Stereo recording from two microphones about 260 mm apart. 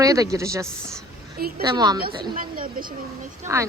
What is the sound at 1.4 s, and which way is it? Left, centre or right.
Speech, right.